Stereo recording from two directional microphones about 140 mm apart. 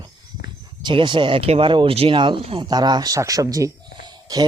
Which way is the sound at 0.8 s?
35° right (ahead or behind).